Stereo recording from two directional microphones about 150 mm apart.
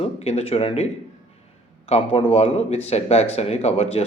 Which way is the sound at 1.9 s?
40° left (ahead or behind).